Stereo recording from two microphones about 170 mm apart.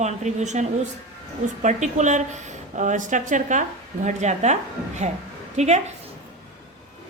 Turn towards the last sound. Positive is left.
turn(degrees=-40)  # may be behind; listen again after turning